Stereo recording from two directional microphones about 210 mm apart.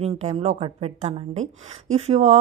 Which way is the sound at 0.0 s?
30° right (ahead or behind).